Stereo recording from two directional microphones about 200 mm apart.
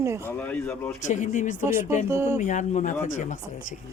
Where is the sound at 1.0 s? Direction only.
35° left (ahead or behind).